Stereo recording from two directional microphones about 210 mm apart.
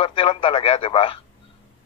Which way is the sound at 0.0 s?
25° left (ahead or behind).